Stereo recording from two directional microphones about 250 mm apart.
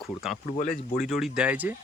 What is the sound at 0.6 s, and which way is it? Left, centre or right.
Speech, left.